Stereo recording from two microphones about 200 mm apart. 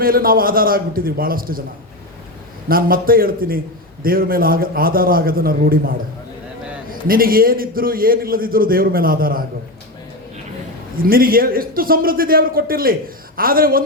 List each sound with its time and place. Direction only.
0.0 s a man's voice: 45° right (ahead or behind)
2.6 s a man's voice: 45° right (ahead or behind)
7.1 s a man's voice: 45° right (ahead or behind)
10.9 s a man's voice: 45° right (ahead or behind)